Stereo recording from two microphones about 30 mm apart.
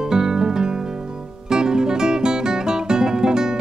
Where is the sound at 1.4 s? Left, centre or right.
Right.